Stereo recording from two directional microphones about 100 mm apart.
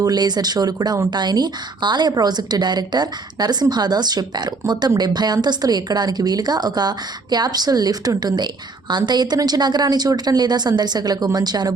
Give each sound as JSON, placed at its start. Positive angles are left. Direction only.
{"t": 0.0, "sound": "speech", "side_deg": -40}